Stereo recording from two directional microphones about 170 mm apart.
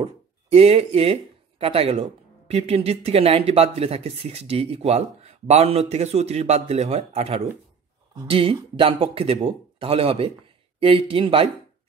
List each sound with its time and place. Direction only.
0.0 s speech: 40° right (ahead or behind)